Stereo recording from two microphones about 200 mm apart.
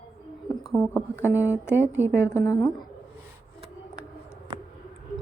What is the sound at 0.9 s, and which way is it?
Speech, 10° left (ahead or behind).